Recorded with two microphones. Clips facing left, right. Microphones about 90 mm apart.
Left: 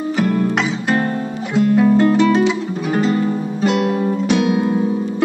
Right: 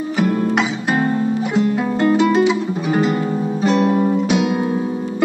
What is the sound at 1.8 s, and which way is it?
Music, 5° right (ahead or behind).